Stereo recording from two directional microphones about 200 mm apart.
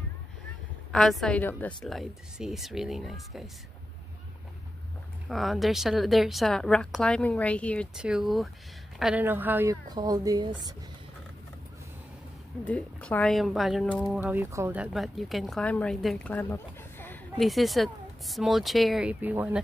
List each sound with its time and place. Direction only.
0.9 s speech: 5° left (ahead or behind)
5.3 s a woman's voice: centre (ahead or behind); by 10.6 s 20° right (ahead or behind)
12.6 s speech: 5° left (ahead or behind); by 19.6 s 10° right (ahead or behind)